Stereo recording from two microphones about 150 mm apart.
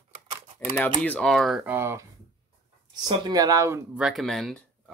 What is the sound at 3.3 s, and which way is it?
Speech, 25° right (ahead or behind).